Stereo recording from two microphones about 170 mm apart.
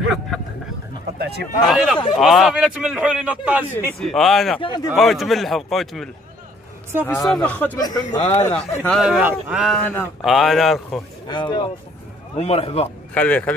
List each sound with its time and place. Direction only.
1.1 s a sound: 70° right (ahead or behind)
1.7 s a man's voice: centre (ahead or behind)
4.0 s a man's voice: centre (ahead or behind)
4.6 s speech: 25° left (ahead or behind)
4.9 s a man's voice: centre (ahead or behind)
7.1 s speech: 20° left (ahead or behind)
7.3 s speech: 10° left (ahead or behind)
7.8 s speech: 25° left (ahead or behind)
8.3 s speech: 10° left (ahead or behind)
9.0 s a man's voice: 5° right (ahead or behind)
9.8 s speech: 10° left (ahead or behind)
10.2 s a man's voice: centre (ahead or behind)
11.2 s a man's voice: 25° left (ahead or behind)
13.1 s speech: 10° left (ahead or behind)